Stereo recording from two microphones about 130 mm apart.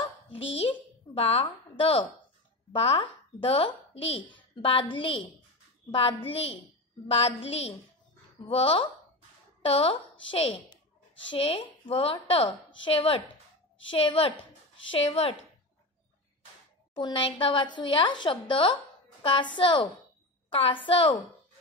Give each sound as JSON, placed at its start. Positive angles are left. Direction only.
{"t": 1.1, "sound": "a woman's voice", "side_deg": 50}
{"t": 14.9, "sound": "a woman's voice", "side_deg": 50}
{"t": 16.9, "sound": "a woman's voice", "side_deg": 40}